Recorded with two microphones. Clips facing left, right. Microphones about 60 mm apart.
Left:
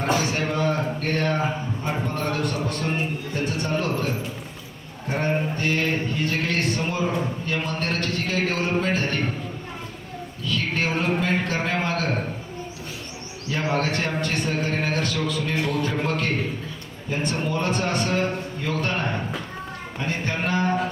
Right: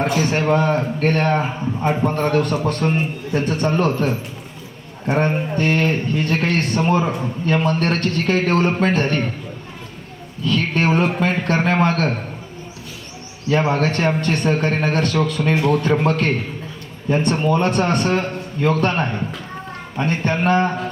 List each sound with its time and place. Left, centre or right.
0.2 s speech: right
10.4 s speech: right
13.5 s a man's voice: right